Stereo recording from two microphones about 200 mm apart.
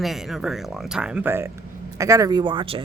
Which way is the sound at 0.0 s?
Centre (ahead or behind).